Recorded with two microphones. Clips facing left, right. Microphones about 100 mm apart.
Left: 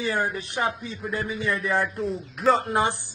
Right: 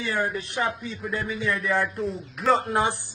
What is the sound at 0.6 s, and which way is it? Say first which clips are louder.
A man's voice: left 1 dB; centre (ahead or behind).